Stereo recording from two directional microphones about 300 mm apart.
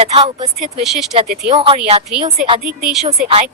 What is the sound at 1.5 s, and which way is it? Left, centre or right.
Speech, centre.